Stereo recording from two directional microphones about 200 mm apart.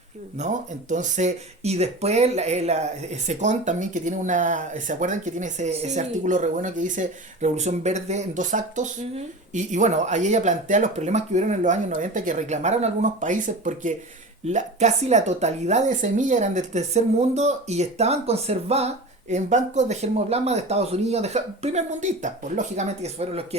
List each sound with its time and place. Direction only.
0.3 s speech: 35° right (ahead or behind)